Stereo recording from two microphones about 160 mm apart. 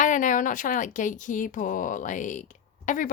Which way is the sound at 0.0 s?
50° left (ahead or behind).